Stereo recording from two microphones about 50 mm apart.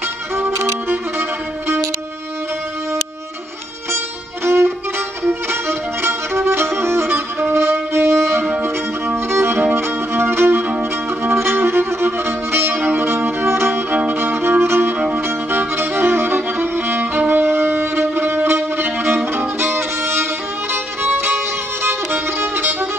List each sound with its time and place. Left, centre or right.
0.4 s music: right
4.5 s music: right
5.2 s violin: right
7.9 s music: right
8.6 s violin: right
9.8 s music: right
15.0 s music: right
15.2 s music: right